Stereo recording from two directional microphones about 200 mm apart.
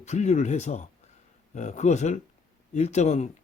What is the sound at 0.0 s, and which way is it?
Speech, 35° left (ahead or behind).